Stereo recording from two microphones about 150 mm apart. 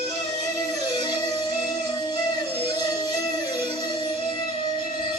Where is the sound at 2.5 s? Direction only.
30° left (ahead or behind).